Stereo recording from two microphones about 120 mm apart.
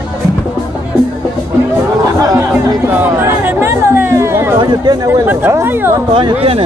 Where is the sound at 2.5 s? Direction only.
15° right (ahead or behind).